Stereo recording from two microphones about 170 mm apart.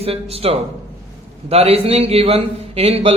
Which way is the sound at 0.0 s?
35° right (ahead or behind).